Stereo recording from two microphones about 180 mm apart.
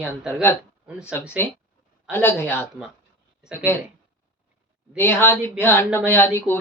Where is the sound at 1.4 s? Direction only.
10° left (ahead or behind).